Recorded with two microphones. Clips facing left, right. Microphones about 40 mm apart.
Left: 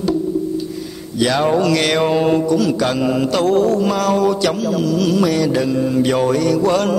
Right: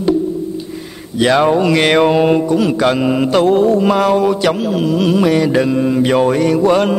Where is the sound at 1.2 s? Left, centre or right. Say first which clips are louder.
Right 4 dB; right.